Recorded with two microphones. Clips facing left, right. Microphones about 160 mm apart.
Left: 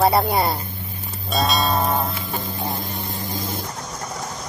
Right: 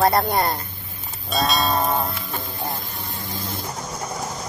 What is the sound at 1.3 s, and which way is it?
Music, centre (ahead or behind).